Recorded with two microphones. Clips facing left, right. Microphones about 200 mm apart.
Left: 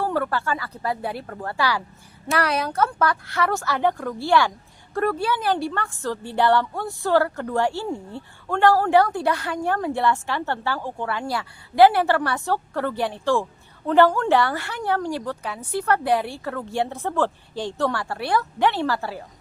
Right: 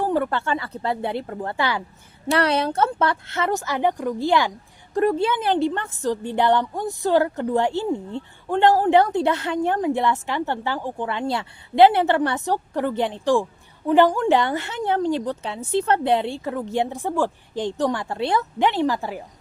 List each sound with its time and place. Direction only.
0.0 s a woman's voice: 20° right (ahead or behind)